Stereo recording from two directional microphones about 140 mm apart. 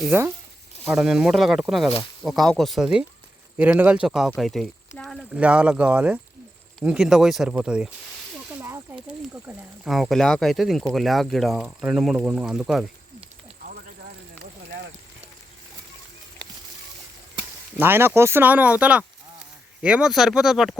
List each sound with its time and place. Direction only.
0.0 s speech: 15° right (ahead or behind)
8.6 s speech: 20° right (ahead or behind)
9.8 s speech: centre (ahead or behind)
17.7 s speech: 15° right (ahead or behind)